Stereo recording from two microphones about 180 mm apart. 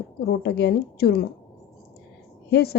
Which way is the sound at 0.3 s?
65° left (ahead or behind).